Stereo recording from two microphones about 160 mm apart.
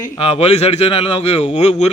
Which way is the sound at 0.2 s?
40° left (ahead or behind).